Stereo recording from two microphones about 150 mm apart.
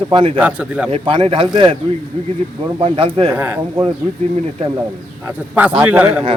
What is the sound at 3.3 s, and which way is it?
Speech, 10° right (ahead or behind).